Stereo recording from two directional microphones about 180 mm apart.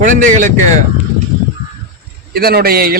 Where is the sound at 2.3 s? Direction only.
60° right (ahead or behind).